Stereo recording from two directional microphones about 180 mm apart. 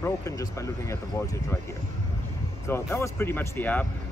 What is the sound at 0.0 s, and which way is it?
Speech, 15° left (ahead or behind).